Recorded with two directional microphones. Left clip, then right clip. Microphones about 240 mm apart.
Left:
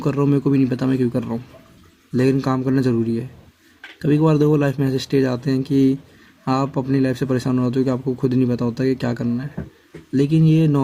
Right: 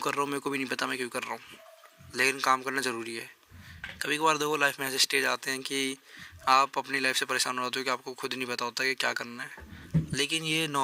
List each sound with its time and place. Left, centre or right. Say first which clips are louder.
0.0 s speech: left 10 dB; right